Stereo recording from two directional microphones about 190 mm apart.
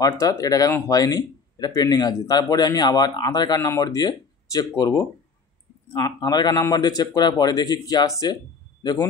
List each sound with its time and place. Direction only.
0.0 s speech: 20° left (ahead or behind)